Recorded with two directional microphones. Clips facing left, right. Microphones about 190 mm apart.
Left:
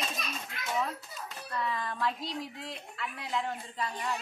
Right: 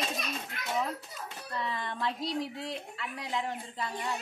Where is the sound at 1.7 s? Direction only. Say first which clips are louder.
Left 2 dB; 25° right (ahead or behind).